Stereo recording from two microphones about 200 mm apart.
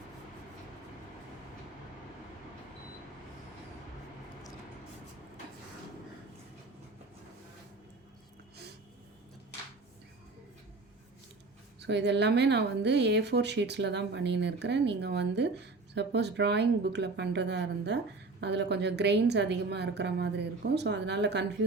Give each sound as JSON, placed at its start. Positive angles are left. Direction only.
{"t": 11.8, "sound": "speech", "side_deg": -60}